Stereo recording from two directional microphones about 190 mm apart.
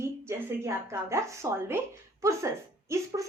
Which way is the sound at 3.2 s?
15° right (ahead or behind).